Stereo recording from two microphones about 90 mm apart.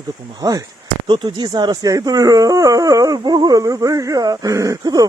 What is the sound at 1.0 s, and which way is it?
Speech, 60° right (ahead or behind).